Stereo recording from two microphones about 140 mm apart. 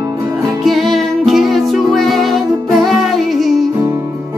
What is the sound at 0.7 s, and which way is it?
Music, centre (ahead or behind).